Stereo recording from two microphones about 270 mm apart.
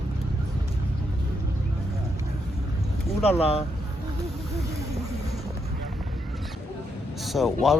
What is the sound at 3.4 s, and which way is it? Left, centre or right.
Speech, left.